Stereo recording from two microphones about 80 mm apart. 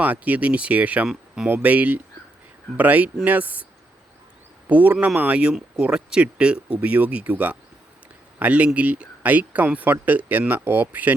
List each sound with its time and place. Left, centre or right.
0.0 s speech: centre
4.7 s speech: centre